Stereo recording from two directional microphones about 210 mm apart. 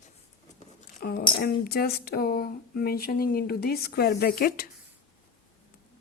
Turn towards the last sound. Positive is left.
turn(degrees=45)  # may be behind; listen again after turning